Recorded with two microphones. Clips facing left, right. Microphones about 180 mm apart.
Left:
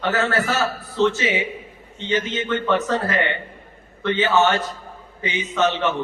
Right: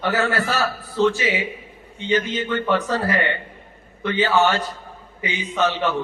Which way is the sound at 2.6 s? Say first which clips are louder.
Left 1 dB; 15° right (ahead or behind).